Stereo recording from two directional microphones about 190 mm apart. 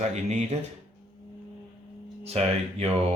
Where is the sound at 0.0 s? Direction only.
35° right (ahead or behind).